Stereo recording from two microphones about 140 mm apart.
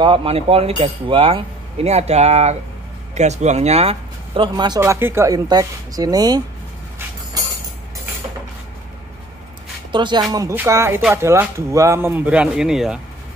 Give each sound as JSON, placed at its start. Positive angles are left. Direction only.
{"t": 0.0, "sound": "speech", "side_deg": -40}
{"t": 4.7, "sound": "speech", "side_deg": -20}
{"t": 9.9, "sound": "speech", "side_deg": -35}
{"t": 10.5, "sound": "speech", "side_deg": -15}